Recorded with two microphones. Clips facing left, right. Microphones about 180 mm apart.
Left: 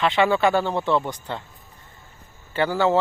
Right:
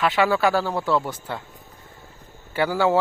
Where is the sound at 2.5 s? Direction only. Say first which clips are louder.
Even; 10° right (ahead or behind).